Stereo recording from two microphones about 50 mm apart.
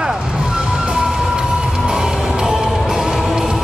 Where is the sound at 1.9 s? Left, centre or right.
Centre.